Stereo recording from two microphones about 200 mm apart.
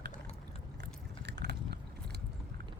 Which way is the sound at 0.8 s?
60° right (ahead or behind).